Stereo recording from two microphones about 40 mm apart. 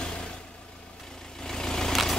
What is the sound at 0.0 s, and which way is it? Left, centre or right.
Vehicle, left.